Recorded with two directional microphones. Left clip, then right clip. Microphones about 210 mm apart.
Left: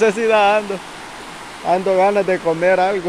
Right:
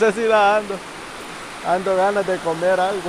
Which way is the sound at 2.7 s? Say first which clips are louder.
Left 3 dB; 35° left (ahead or behind).